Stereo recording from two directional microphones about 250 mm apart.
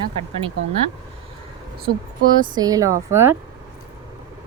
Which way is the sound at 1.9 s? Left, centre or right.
Right.